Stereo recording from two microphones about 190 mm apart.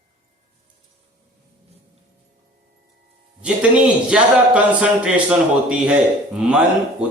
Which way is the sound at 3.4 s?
5° right (ahead or behind).